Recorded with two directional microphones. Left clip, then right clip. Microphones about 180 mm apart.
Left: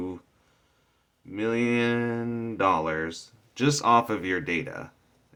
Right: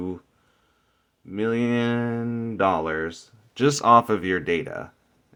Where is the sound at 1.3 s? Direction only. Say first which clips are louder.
Right 2 dB; 40° right (ahead or behind).